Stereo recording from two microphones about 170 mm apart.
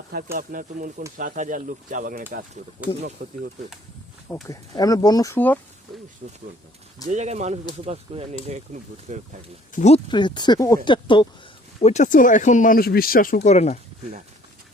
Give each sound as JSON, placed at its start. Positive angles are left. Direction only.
{"t": 0.3, "sound": "speech", "side_deg": -55}
{"t": 4.4, "sound": "speech", "side_deg": 20}
{"t": 7.1, "sound": "speech", "side_deg": -40}
{"t": 9.7, "sound": "speech", "side_deg": 40}
{"t": 10.1, "sound": "speech", "side_deg": 25}
{"t": 11.8, "sound": "speech", "side_deg": 40}